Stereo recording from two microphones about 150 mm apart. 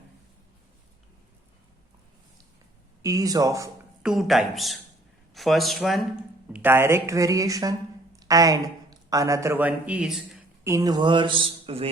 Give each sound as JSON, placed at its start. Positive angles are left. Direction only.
{"t": 3.0, "sound": "speech", "side_deg": -25}
{"t": 4.0, "sound": "speech", "side_deg": 0}
{"t": 6.6, "sound": "a woman's voice", "side_deg": -15}
{"t": 10.6, "sound": "a man's voice", "side_deg": -20}